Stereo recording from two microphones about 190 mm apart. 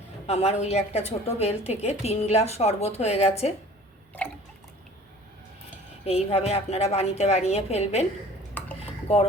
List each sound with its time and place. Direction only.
0.3 s a woman's voice: 35° left (ahead or behind)
4.2 s drip: 10° left (ahead or behind)
6.1 s a woman's voice: 35° left (ahead or behind)